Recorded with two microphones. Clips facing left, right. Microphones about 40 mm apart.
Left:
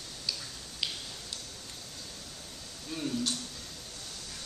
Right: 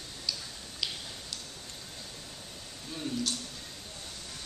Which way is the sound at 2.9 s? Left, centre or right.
Centre.